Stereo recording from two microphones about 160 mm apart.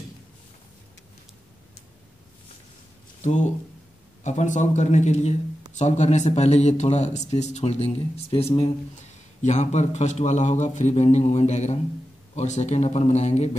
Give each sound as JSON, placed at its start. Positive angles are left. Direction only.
{"t": 3.2, "sound": "speech", "side_deg": 45}
{"t": 9.4, "sound": "speech", "side_deg": 50}